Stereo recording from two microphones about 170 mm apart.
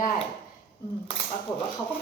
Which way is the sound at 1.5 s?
20° left (ahead or behind).